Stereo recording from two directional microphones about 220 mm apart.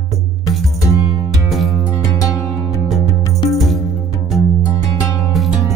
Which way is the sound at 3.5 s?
Centre (ahead or behind).